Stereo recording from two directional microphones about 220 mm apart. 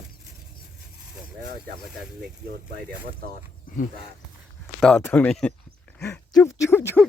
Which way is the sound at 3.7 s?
40° left (ahead or behind).